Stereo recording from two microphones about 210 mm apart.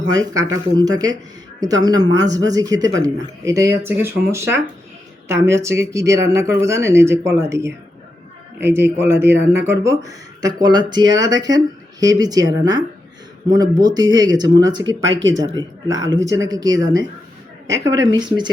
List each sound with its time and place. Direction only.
0.1 s speech: 15° right (ahead or behind)
15.0 s speech: 60° right (ahead or behind)
15.5 s speech: 15° right (ahead or behind)